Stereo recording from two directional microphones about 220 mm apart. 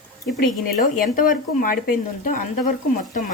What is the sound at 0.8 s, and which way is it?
Speech, 40° left (ahead or behind).